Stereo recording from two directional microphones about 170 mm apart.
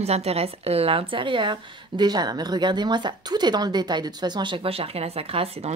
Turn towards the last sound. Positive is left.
turn(degrees=-35)  # may be behind; listen again after turning